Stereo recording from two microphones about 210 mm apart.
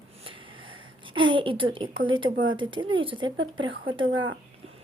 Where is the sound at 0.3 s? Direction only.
25° right (ahead or behind).